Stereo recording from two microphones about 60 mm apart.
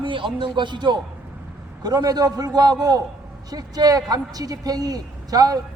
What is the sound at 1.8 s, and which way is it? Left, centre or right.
Speech, right.